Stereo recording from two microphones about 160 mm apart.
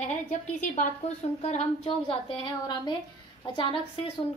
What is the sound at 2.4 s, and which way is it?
A woman's voice, 30° left (ahead or behind).